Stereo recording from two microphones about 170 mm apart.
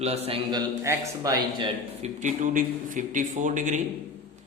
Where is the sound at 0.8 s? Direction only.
15° right (ahead or behind).